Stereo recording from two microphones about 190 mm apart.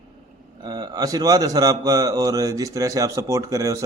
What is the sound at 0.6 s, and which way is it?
A man's voice, 20° right (ahead or behind).